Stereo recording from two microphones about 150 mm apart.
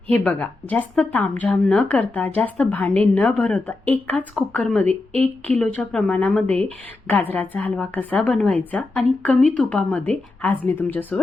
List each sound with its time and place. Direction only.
0.1 s a woman's voice: 10° left (ahead or behind)
4.9 s speech: 45° right (ahead or behind)
5.5 s a woman's voice: 10° left (ahead or behind)